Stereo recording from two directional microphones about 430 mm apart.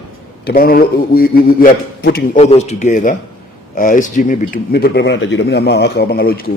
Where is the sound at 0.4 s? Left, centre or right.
Left.